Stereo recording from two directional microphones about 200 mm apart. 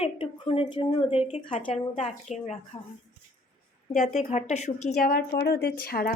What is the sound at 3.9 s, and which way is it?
A woman's voice, 35° left (ahead or behind).